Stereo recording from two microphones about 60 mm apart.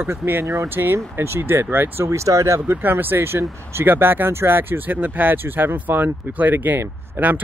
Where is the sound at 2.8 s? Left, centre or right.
Right.